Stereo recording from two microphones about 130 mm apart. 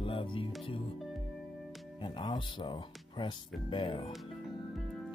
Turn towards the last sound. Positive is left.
turn(degrees=40)  # may be behind; listen again after turning